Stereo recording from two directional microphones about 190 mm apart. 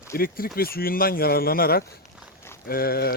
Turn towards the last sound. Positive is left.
turn(degrees=55)  # may be behind; listen again after turning